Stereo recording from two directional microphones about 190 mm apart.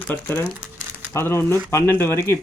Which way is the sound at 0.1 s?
10° left (ahead or behind).